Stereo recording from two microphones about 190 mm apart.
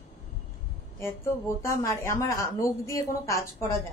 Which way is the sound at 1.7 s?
15° left (ahead or behind).